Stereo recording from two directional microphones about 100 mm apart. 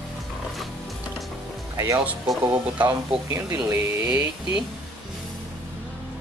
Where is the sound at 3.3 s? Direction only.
30° right (ahead or behind).